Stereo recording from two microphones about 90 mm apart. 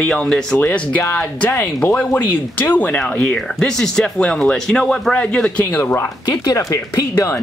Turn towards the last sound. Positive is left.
turn(degrees=30)  # may be behind; listen again after turning